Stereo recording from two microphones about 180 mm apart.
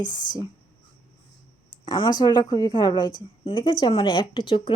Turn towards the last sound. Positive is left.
turn(degrees=30)  # may be behind; listen again after turning